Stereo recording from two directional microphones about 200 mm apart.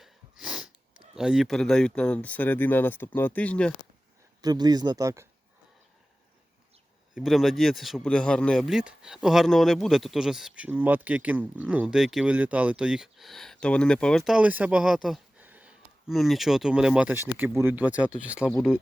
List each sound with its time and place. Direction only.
0.0 s sneeze: 5° right (ahead or behind)
1.1 s speech: 5° right (ahead or behind)
4.4 s speech: 20° right (ahead or behind)
7.1 s speech: centre (ahead or behind)